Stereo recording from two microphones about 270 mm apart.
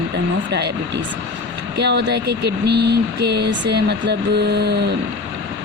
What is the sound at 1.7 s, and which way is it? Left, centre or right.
Speech, right.